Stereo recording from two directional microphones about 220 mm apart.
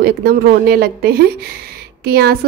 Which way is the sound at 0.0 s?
45° right (ahead or behind).